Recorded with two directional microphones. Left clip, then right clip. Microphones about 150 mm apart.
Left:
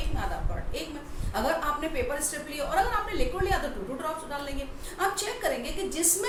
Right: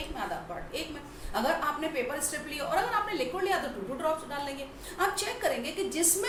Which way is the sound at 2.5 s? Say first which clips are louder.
Left 3 dB; 15° right (ahead or behind).